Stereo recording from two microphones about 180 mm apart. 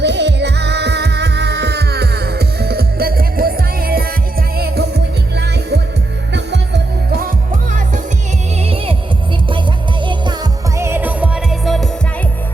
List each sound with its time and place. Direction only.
0.0 s music: 70° right (ahead or behind)
8.6 s music: 30° right (ahead or behind)
10.8 s music: 15° right (ahead or behind)